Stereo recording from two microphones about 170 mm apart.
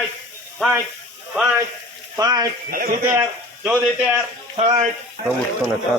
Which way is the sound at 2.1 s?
20° right (ahead or behind).